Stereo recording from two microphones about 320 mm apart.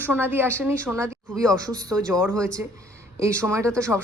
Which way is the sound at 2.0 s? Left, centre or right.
Centre.